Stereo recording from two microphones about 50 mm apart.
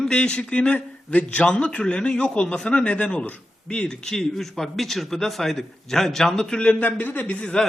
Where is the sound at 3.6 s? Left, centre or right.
Centre.